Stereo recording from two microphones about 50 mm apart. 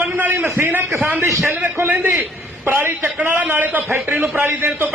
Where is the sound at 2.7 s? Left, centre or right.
Right.